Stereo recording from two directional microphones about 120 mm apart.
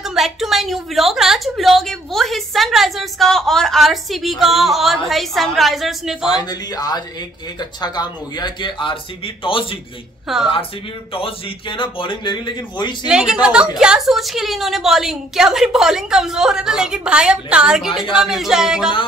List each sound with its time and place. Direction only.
0.0 s a woman's voice: centre (ahead or behind)
6.4 s a man's voice: 30° left (ahead or behind)
10.2 s a woman's voice: 5° right (ahead or behind)
11.1 s speech: 50° left (ahead or behind)
13.0 s a woman's voice: 5° right (ahead or behind)